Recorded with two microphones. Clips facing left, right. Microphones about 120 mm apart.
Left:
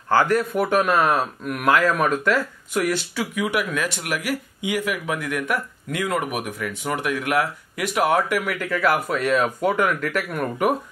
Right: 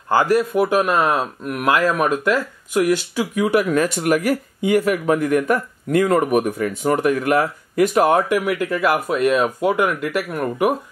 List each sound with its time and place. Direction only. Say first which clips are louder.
0.2 s speech: right 3 dB; 10° right (ahead or behind)
1.1 s speech: right 1 dB; centre (ahead or behind)
2.0 s speech: right 2 dB; 15° right (ahead or behind)
3.3 s speech: right 8 dB; 35° right (ahead or behind)
8.4 s speech: right 4 dB; 15° right (ahead or behind)